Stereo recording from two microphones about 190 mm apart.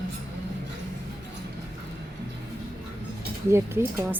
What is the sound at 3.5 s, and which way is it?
Speech, 15° right (ahead or behind).